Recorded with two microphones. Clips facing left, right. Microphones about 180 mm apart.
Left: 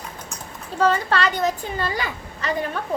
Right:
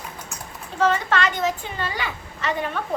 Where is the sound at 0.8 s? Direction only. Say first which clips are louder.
Left 1 dB; 35° left (ahead or behind).